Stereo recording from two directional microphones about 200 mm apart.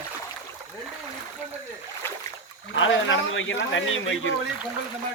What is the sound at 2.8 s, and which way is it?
Speech, 70° left (ahead or behind).